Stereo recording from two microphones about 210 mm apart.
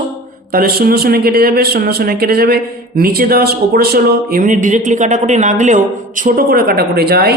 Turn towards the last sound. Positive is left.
turn(degrees=-50)  # may be behind; listen again after turning